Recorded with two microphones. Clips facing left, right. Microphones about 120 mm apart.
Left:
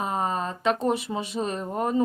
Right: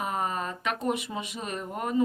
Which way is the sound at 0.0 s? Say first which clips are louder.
Left 3 dB; 30° left (ahead or behind).